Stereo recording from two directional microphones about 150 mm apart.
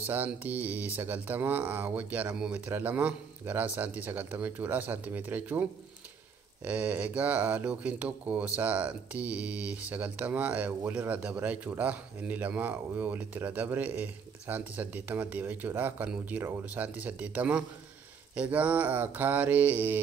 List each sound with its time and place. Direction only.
0.0 s speech: 10° right (ahead or behind)